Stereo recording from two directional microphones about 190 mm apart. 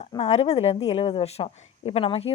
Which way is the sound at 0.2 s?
35° left (ahead or behind).